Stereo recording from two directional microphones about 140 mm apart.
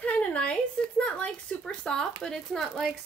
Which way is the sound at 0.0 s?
10° left (ahead or behind).